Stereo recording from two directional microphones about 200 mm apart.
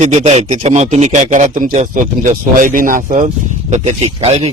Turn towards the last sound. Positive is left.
turn(degrees=-35)  # may be behind; listen again after turning